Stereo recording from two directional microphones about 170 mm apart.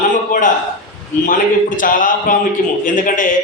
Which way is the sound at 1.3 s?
50° left (ahead or behind).